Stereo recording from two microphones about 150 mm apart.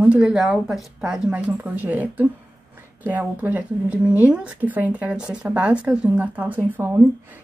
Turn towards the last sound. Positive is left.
turn(degrees=-10)  # may be behind; listen again after turning